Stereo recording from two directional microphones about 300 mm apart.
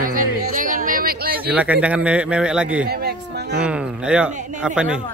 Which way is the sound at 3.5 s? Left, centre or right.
Centre.